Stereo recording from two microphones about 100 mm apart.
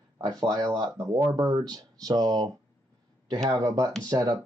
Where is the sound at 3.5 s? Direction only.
40° right (ahead or behind).